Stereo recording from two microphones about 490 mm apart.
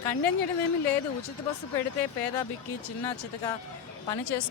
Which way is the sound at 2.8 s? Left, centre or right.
Left.